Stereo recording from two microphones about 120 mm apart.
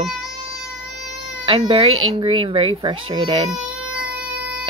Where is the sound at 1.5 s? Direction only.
50° right (ahead or behind).